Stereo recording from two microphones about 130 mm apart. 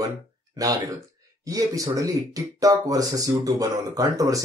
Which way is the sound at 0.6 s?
25° right (ahead or behind).